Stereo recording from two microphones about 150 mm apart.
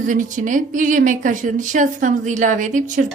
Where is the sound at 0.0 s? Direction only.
60° right (ahead or behind).